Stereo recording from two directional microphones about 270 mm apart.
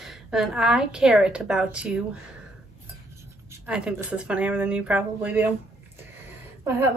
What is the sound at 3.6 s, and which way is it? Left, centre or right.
A woman's voice, centre.